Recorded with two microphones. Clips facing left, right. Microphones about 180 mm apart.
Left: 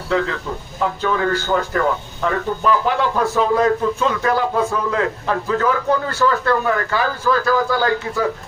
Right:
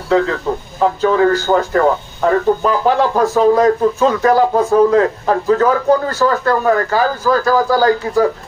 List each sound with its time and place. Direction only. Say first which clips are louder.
0.1 s a man's voice: right 6 dB; 35° right (ahead or behind)